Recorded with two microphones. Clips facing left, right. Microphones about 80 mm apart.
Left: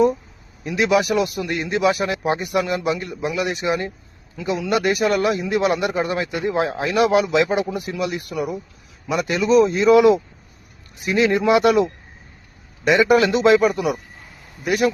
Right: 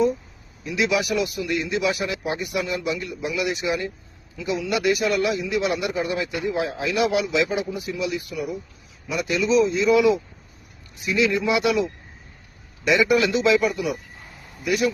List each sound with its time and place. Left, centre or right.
0.6 s a man's voice: left
4.4 s a man's voice: left
11.0 s a man's voice: left